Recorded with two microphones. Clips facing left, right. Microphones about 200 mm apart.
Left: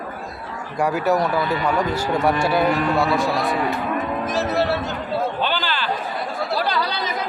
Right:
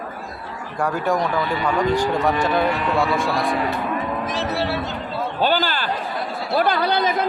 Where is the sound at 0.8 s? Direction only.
5° left (ahead or behind).